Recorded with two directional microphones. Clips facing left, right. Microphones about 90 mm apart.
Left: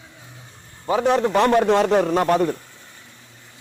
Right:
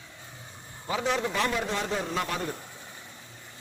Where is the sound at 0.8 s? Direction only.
45° left (ahead or behind).